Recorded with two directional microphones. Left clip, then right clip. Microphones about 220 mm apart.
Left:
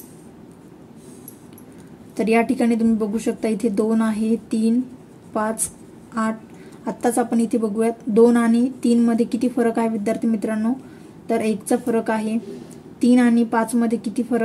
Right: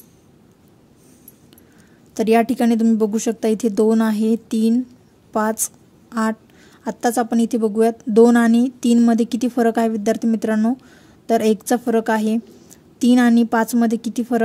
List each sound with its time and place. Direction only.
2.2 s a woman's voice: 45° right (ahead or behind)
6.8 s a woman's voice: 45° right (ahead or behind)